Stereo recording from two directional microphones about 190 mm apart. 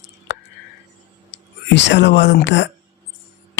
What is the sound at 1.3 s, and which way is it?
Speech, 70° left (ahead or behind).